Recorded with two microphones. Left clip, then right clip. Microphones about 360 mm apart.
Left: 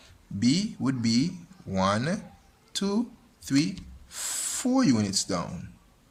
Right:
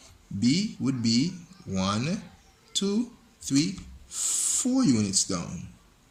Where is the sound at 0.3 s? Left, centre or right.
Left.